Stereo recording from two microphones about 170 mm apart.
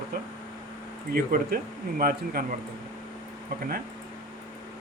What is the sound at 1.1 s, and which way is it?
Speech, 60° right (ahead or behind).